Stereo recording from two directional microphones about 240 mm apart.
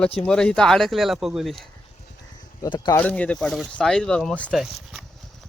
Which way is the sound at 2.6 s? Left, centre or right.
Centre.